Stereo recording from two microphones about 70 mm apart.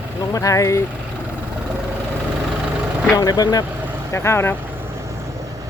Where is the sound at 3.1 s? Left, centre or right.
Left.